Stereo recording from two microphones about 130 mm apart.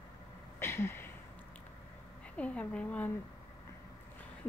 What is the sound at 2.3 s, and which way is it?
Speech, 10° left (ahead or behind).